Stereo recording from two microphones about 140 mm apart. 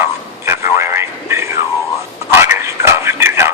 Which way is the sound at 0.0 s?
20° right (ahead or behind).